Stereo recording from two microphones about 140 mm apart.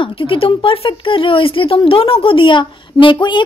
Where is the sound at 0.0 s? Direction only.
40° left (ahead or behind).